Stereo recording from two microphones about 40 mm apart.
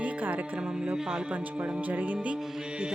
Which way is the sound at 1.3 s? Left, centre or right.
Right.